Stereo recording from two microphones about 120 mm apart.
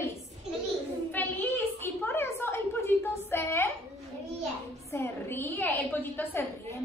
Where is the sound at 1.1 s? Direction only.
15° left (ahead or behind).